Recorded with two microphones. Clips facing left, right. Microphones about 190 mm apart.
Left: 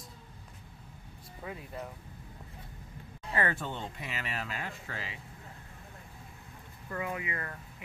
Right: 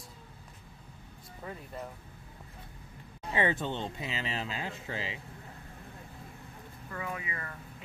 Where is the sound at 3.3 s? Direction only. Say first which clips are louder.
Right 3 dB; 20° right (ahead or behind).